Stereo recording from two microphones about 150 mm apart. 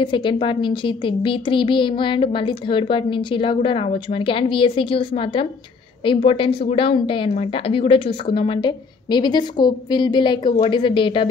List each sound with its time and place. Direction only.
0.0 s speech: 35° left (ahead or behind)